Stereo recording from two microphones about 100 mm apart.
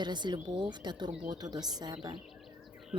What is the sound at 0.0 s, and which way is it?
Speech, 50° right (ahead or behind).